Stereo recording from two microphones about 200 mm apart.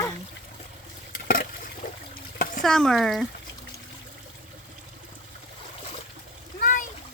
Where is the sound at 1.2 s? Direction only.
50° left (ahead or behind).